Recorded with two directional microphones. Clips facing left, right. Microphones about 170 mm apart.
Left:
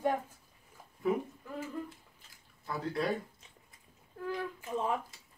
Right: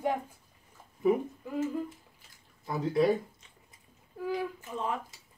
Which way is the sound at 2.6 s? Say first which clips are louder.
Right 8 dB; 20° right (ahead or behind).